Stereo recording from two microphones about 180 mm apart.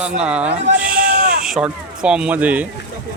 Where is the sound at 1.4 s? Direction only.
5° right (ahead or behind).